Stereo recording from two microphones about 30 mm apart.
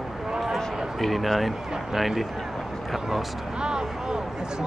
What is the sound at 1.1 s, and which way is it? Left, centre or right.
Speech, centre.